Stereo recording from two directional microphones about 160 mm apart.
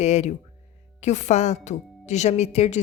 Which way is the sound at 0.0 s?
45° left (ahead or behind).